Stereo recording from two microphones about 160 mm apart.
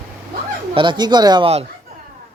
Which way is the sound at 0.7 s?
30° right (ahead or behind).